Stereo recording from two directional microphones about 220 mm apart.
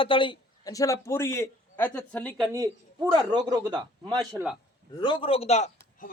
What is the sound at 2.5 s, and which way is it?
A man's voice, 15° right (ahead or behind).